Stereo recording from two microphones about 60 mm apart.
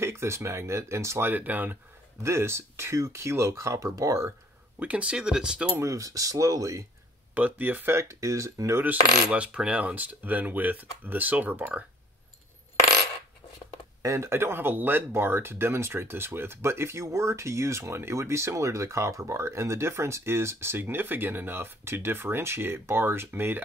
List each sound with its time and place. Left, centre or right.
0.0 s speech: right
1.3 s speech: right
2.2 s speech: right
4.7 s speech: right
5.8 s speech: right
7.3 s speech: right
7.9 s speech: right
9.3 s speech: centre
14.0 s speech: right